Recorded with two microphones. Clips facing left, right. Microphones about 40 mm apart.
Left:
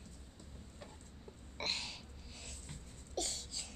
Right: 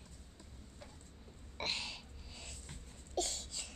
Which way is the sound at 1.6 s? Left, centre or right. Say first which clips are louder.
Right 1 dB; right.